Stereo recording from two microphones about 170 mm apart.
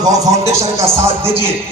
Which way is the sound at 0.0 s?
20° right (ahead or behind).